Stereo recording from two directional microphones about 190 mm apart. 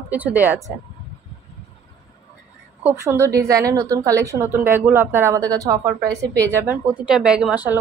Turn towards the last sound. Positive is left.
turn(degrees=-5)  # may be behind; listen again after turning